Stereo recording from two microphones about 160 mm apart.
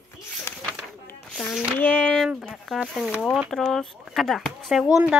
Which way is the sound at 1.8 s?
10° left (ahead or behind).